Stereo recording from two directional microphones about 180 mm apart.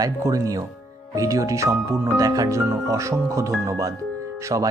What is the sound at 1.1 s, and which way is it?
Speech, 20° right (ahead or behind).